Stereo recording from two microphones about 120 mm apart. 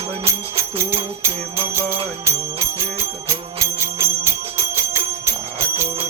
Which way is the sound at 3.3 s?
25° right (ahead or behind).